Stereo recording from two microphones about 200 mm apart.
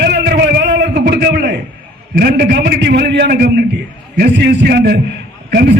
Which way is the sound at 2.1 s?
50° right (ahead or behind).